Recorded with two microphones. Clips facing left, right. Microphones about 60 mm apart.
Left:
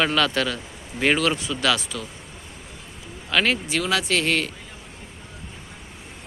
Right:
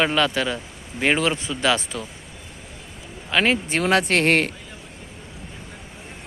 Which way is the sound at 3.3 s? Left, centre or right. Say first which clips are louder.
Right 2 dB; centre.